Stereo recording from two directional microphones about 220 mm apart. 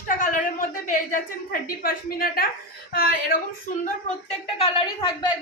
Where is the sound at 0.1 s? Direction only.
35° left (ahead or behind).